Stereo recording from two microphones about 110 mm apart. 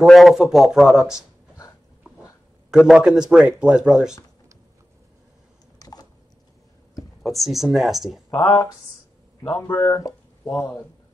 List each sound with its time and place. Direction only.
0.0 s speech: centre (ahead or behind)
2.7 s speech: 5° right (ahead or behind)
5.8 s a sound: 35° left (ahead or behind)
7.2 s speech: centre (ahead or behind)
8.3 s speech: 25° left (ahead or behind)
9.8 s speech: 30° left (ahead or behind)